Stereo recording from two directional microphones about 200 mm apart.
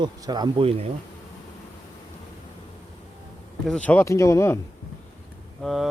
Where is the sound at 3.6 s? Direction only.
5° left (ahead or behind).